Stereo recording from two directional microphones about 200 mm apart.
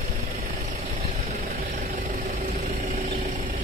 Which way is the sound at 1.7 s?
35° right (ahead or behind).